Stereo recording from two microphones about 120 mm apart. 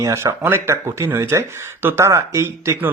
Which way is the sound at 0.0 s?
25° right (ahead or behind).